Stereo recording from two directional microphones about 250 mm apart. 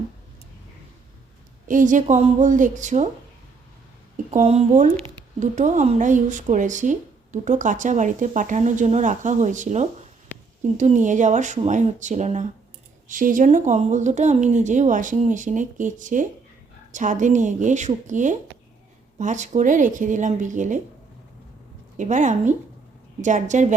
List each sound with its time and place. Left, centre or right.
1.6 s speech: right
4.3 s speech: right
21.9 s speech: right